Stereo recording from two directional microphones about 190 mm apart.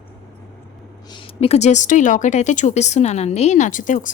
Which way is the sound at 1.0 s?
25° left (ahead or behind).